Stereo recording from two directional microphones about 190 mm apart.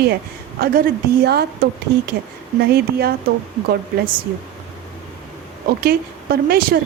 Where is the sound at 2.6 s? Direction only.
55° right (ahead or behind).